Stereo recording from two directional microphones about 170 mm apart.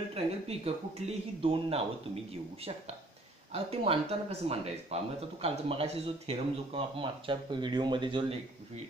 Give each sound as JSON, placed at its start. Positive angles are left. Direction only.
{"t": 0.1, "sound": "speech", "side_deg": -35}
{"t": 3.7, "sound": "speech", "side_deg": -35}